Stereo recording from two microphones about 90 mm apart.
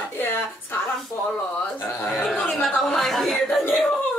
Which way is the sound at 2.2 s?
5° left (ahead or behind).